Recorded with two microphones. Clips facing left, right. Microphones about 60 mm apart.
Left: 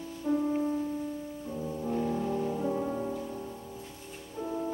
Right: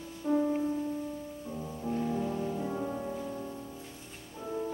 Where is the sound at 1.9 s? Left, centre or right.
Centre.